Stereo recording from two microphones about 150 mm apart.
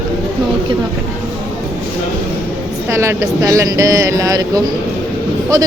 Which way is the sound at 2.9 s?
20° right (ahead or behind).